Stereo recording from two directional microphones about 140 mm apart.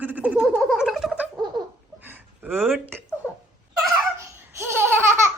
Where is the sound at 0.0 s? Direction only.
10° right (ahead or behind).